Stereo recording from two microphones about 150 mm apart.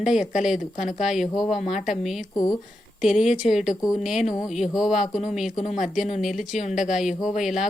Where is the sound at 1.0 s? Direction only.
5° right (ahead or behind).